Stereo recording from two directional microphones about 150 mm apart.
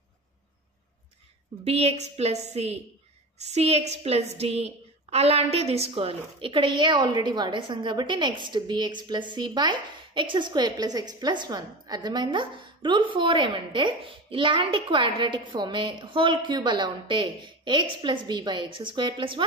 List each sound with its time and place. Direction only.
1.6 s a woman's voice: 45° right (ahead or behind)